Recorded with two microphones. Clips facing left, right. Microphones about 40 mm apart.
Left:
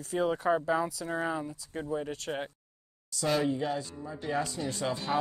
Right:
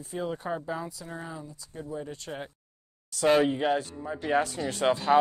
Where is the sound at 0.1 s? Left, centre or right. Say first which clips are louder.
Left 5 dB; left.